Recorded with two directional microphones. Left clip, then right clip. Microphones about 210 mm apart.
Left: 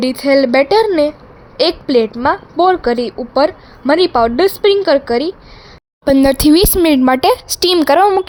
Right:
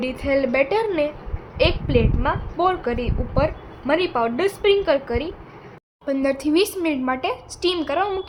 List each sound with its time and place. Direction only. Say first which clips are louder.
0.0 s a woman's voice: left 9 dB; 40° left (ahead or behind)